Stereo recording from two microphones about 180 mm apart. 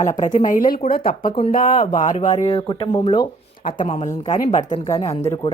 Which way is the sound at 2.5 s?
25° left (ahead or behind).